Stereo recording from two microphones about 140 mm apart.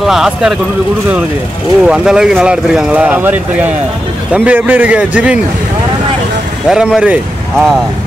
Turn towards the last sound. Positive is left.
turn(degrees=0)  # may be behind; listen again after turning